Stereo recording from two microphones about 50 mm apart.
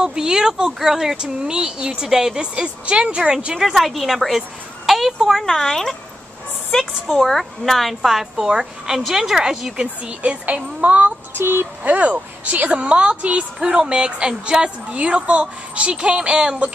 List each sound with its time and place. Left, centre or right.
0.0 s a woman's voice: centre
3.5 s a woman's voice: centre
4.4 s a sound: centre
5.4 s speech: centre
7.1 s a woman's voice: centre
10.0 s a woman's voice: right
11.3 s speech: right
11.8 s a woman's voice: right